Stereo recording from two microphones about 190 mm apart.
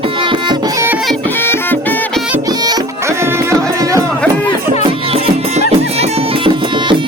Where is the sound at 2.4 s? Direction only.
20° right (ahead or behind).